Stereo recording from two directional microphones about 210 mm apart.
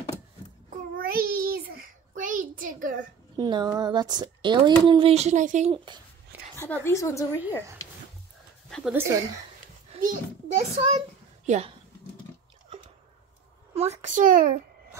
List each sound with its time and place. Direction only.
0.9 s child singing: 45° right (ahead or behind)
3.3 s speech: 20° right (ahead or behind); by 5.8 s 35° right (ahead or behind)
6.5 s a woman's voice: 10° left (ahead or behind)
8.6 s a sound: centre (ahead or behind)
8.9 s speech: 10° right (ahead or behind)
9.9 s a sound: 30° right (ahead or behind)
10.7 s speech: 30° right (ahead or behind)
13.7 s a child's voice: 35° right (ahead or behind)